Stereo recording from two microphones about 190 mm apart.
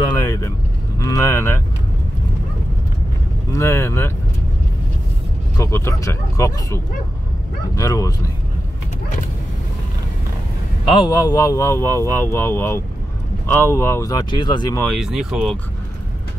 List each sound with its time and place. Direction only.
0.2 s vehicle: 15° left (ahead or behind)
3.5 s vehicle: 15° left (ahead or behind)
5.6 s speech: 15° left (ahead or behind)
10.9 s speech: 25° left (ahead or behind)
14.8 s speech: centre (ahead or behind)